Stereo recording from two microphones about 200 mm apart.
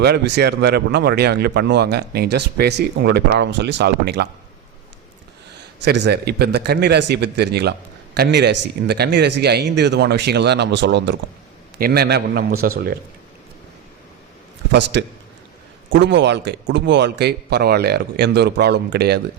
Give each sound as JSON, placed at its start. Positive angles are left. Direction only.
{"t": 0.0, "sound": "a man's voice", "side_deg": -55}
{"t": 5.8, "sound": "a man's voice", "side_deg": -60}
{"t": 14.7, "sound": "a man's voice", "side_deg": -60}